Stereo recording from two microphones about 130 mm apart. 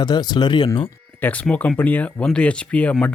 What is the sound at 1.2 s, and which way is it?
Speech, 10° left (ahead or behind).